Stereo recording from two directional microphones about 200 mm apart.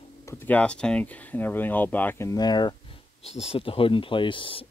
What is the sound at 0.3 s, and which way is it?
Speech, 10° left (ahead or behind).